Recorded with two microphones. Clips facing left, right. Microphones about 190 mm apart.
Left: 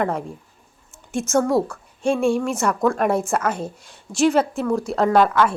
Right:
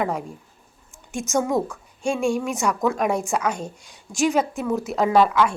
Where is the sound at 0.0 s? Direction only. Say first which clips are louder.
Left 2 dB; centre (ahead or behind).